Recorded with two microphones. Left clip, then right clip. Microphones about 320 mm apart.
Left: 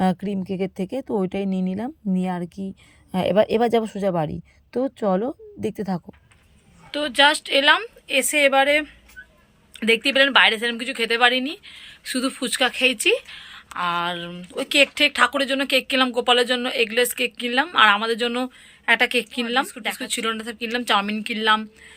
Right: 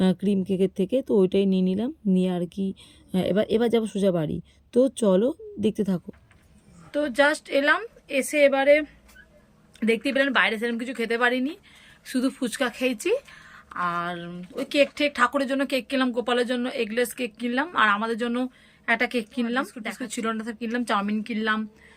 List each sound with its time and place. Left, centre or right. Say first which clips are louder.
0.0 s speech: left 1 dB; centre
2.6 s speech: right 3 dB; left
3.1 s speech: left 5 dB; centre
5.7 s speech: even; centre
6.9 s speech: left 4 dB; centre